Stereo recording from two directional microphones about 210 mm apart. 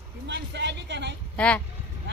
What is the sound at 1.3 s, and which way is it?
Speech, 5° left (ahead or behind).